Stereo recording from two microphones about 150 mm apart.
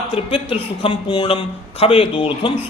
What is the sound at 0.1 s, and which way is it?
Speech, 35° left (ahead or behind).